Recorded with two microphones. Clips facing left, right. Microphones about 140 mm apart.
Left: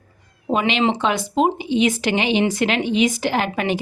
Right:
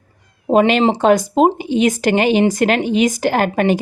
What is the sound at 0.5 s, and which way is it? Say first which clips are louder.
Speech: right 6 dB; 45° right (ahead or behind).